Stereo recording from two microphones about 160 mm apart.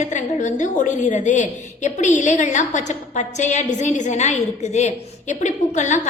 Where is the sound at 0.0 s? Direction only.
50° left (ahead or behind).